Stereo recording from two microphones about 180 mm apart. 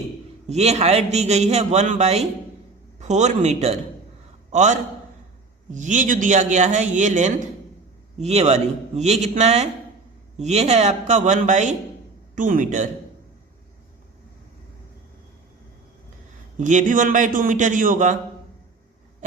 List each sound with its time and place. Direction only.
0.4 s a man's voice: 35° right (ahead or behind)
16.6 s a man's voice: 45° right (ahead or behind)